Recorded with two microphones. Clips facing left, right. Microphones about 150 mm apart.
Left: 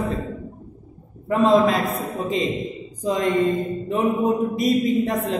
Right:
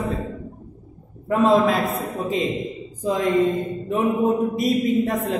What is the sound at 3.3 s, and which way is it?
Mantra, centre (ahead or behind).